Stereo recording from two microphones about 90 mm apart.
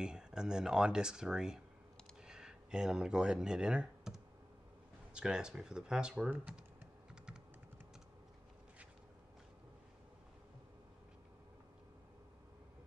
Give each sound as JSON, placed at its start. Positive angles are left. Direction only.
{"t": 0.0, "sound": "speech", "side_deg": -10}